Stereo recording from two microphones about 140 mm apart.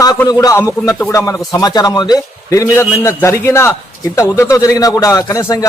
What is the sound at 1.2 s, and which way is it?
A man's voice, 25° left (ahead or behind).